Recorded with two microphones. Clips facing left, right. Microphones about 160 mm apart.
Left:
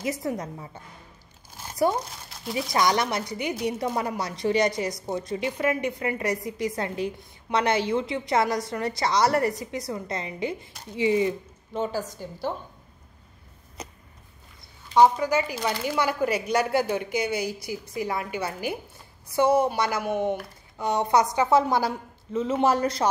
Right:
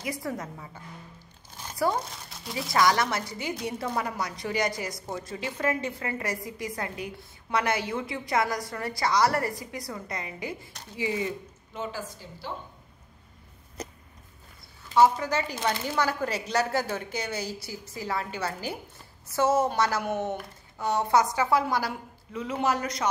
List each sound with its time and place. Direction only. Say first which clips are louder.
0.0 s a woman's voice: left 4 dB; 20° left (ahead or behind)
1.9 s speech: left 2 dB; centre (ahead or behind)
2.7 s a woman's voice: even; 20° left (ahead or behind)
11.7 s a woman's voice: left 7 dB; 35° left (ahead or behind)
15.0 s a woman's voice: left 3 dB; 10° left (ahead or behind); by 23.0 s 30° left (ahead or behind)